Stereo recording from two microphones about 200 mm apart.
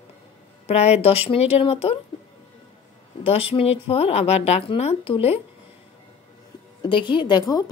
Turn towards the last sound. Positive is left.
turn(degrees=20)  # may be behind; listen again after turning